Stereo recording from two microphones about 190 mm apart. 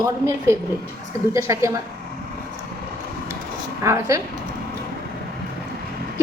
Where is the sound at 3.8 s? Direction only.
15° right (ahead or behind).